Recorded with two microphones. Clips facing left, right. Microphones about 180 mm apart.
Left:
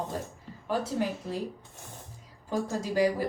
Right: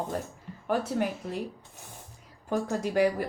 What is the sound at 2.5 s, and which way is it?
Speech, 60° right (ahead or behind).